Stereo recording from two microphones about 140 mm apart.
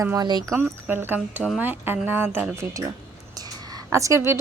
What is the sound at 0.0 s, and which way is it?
Speech, 25° right (ahead or behind).